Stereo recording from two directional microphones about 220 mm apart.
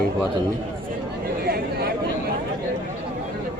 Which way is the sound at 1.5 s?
45° right (ahead or behind).